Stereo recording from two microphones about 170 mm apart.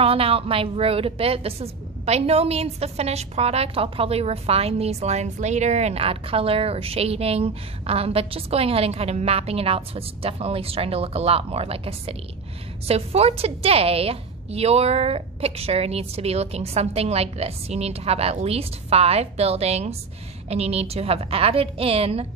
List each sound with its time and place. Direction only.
0.0 s a woman's voice: 35° right (ahead or behind)